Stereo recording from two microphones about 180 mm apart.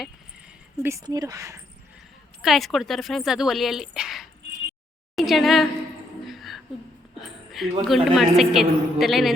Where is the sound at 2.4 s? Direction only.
Centre (ahead or behind).